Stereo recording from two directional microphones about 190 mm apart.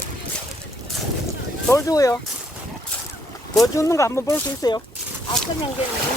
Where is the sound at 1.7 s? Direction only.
15° left (ahead or behind).